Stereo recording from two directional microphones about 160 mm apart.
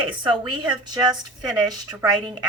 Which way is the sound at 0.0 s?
30° right (ahead or behind).